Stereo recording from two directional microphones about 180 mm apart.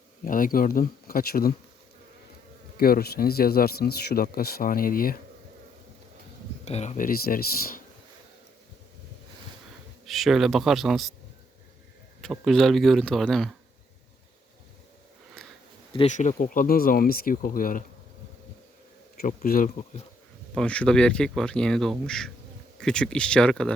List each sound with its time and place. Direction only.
0.3 s speech: 50° left (ahead or behind)
2.7 s speech: 55° left (ahead or behind)
6.7 s speech: 40° left (ahead or behind); by 7.4 s 55° left (ahead or behind)
10.1 s speech: centre (ahead or behind)
12.2 s speech: centre (ahead or behind)
15.4 s a sound: 5° left (ahead or behind)
16.0 s speech: 45° left (ahead or behind)
19.2 s speech: 50° left (ahead or behind)
20.6 s speech: 5° left (ahead or behind)